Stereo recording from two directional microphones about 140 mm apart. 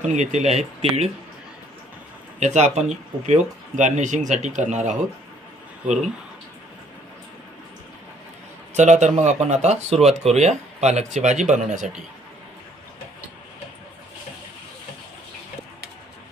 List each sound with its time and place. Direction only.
0.0 s speech: 60° right (ahead or behind)
2.4 s speech: 55° right (ahead or behind)
8.7 s speech: 55° right (ahead or behind)